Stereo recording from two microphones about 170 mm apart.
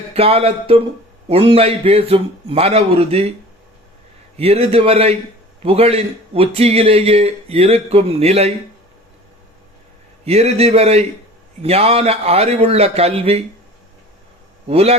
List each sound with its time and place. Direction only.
0.1 s a man's voice: 35° right (ahead or behind)
4.4 s a man's voice: 35° right (ahead or behind)
10.2 s a man's voice: 40° right (ahead or behind)
14.7 s a man's voice: 35° right (ahead or behind)